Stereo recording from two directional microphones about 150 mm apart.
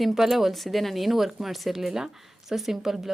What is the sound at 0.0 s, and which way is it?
Speech, centre (ahead or behind).